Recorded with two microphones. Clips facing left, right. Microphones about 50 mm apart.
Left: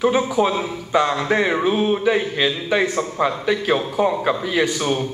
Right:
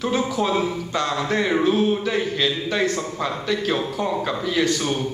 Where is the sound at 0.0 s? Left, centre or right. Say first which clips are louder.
Left 5 dB; centre.